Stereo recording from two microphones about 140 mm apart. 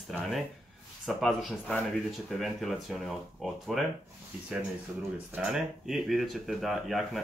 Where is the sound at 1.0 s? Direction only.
Centre (ahead or behind).